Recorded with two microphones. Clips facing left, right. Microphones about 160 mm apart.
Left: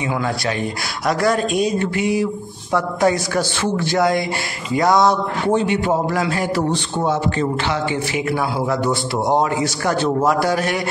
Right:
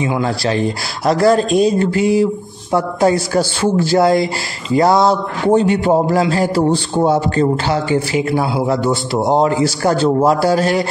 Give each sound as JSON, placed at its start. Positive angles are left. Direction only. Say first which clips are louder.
{"t": 0.0, "sound": "a man's voice", "louder": "right 4 dB", "side_deg": -30}